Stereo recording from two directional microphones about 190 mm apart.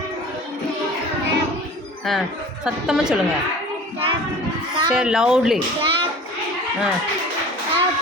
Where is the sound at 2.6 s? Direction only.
5° right (ahead or behind).